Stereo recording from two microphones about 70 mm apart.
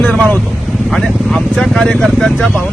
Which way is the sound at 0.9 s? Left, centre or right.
Centre.